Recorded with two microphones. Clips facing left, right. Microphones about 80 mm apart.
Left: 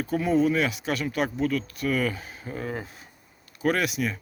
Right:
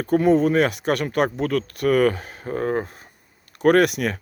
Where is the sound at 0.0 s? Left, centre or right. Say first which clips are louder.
Right 6 dB; right.